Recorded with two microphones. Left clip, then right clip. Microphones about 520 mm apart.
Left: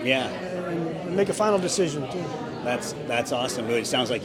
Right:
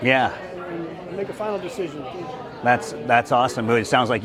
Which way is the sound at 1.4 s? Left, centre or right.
Left.